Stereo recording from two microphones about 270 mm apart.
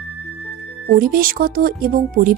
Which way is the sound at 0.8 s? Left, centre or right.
Right.